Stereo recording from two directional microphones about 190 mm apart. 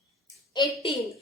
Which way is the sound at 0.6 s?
20° left (ahead or behind).